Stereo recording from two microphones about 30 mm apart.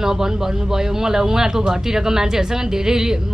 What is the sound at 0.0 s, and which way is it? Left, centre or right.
Speech, centre.